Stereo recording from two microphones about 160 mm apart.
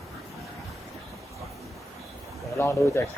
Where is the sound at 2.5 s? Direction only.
20° left (ahead or behind).